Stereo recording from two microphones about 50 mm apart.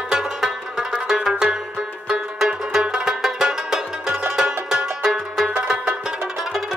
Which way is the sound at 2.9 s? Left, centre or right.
Centre.